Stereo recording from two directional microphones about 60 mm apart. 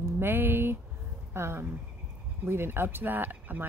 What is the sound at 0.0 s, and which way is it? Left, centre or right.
Speech, right.